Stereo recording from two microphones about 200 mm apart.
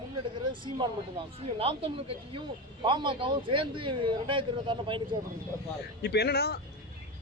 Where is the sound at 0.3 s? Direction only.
25° right (ahead or behind).